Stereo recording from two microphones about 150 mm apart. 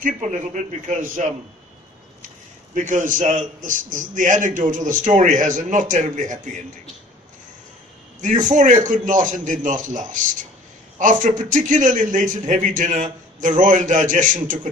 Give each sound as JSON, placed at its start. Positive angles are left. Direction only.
{"t": 0.0, "sound": "a man's voice", "side_deg": -55}
{"t": 2.7, "sound": "a man's voice", "side_deg": -60}
{"t": 8.2, "sound": "a man's voice", "side_deg": -55}